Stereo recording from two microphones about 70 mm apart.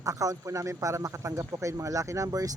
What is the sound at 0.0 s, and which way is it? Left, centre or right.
Speech, right.